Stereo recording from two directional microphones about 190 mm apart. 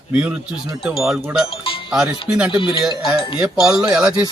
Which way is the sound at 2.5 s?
25° left (ahead or behind).